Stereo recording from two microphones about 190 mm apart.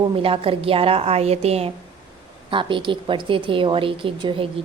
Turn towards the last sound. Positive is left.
turn(degrees=-25)  # may be behind; listen again after turning